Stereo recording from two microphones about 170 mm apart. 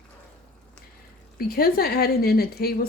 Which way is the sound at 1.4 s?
60° left (ahead or behind).